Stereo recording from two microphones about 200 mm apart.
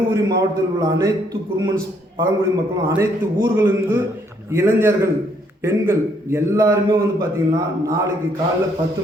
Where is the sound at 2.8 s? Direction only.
15° right (ahead or behind).